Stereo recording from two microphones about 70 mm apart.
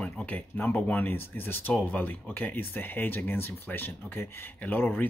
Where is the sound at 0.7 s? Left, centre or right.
Left.